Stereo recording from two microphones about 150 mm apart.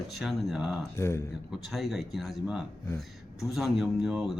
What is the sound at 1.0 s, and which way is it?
Speech, 15° left (ahead or behind).